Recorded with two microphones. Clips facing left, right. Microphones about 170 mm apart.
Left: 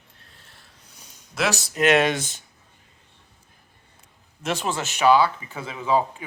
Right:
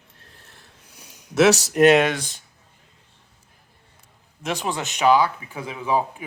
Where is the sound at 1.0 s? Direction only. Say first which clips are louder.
Right 7 dB; 10° right (ahead or behind).